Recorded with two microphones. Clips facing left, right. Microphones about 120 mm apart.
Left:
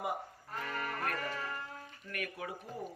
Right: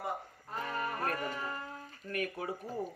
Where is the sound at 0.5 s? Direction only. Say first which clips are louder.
Right 3 dB; 20° right (ahead or behind).